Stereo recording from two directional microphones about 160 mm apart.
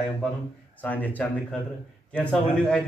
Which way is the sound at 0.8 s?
10° left (ahead or behind).